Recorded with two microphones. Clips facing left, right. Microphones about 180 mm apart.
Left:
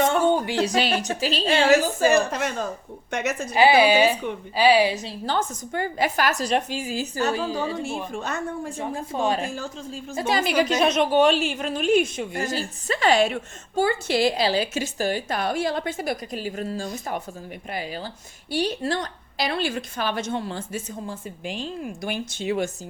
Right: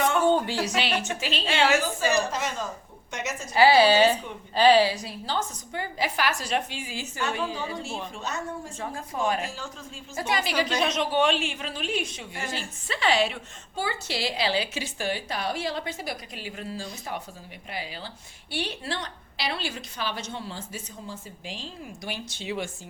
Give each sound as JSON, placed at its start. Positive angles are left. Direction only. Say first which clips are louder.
{"t": 0.3, "sound": "a sound", "louder": "left 1 dB", "side_deg": 15}
{"t": 0.6, "sound": "a woman's voice", "louder": "left 5 dB", "side_deg": 40}
{"t": 3.5, "sound": "a woman's voice", "louder": "left 1 dB", "side_deg": 15}
{"t": 5.2, "sound": "a woman's voice", "louder": "left 5 dB", "side_deg": 55}
{"t": 8.1, "sound": "a woman's voice", "louder": "left 4 dB", "side_deg": 55}
{"t": 8.8, "sound": "speech", "louder": "left 3 dB", "side_deg": 30}
{"t": 9.5, "sound": "a woman's voice", "louder": "left 7 dB", "side_deg": 45}
{"t": 10.2, "sound": "speech", "louder": "left 4 dB", "side_deg": 25}
{"t": 10.4, "sound": "a woman's voice", "louder": "left 7 dB", "side_deg": 50}